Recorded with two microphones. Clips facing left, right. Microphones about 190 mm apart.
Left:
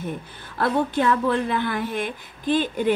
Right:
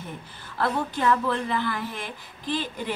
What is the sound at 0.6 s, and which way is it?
A woman's voice, 60° left (ahead or behind).